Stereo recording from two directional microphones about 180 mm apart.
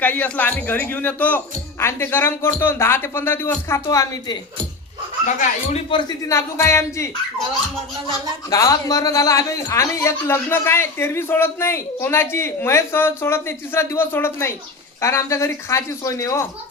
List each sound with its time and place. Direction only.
0.0 s a man's voice: 10° left (ahead or behind)
5.2 s speech: 45° left (ahead or behind)
5.9 s a man's voice: 25° left (ahead or behind)
8.4 s a man's voice: 20° left (ahead or behind)